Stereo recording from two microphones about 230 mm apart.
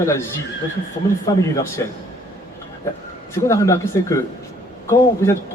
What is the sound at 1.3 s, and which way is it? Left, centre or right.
Speech, centre.